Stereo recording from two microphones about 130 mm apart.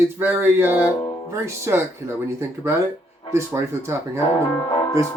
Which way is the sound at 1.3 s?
20° right (ahead or behind).